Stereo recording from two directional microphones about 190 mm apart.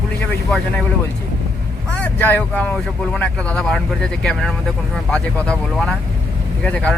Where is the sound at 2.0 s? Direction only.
10° left (ahead or behind).